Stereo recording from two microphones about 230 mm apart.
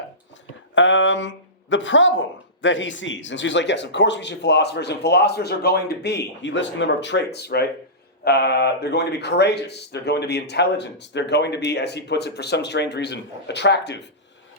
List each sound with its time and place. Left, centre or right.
0.8 s speech: left